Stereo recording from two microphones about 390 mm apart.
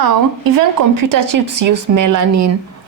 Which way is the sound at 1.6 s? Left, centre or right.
Right.